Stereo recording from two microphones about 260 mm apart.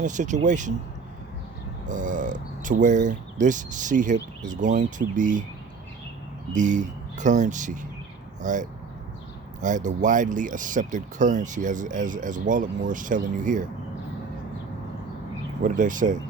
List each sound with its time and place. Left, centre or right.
0.0 s speech: right
1.9 s speech: right
6.5 s speech: right
15.6 s speech: right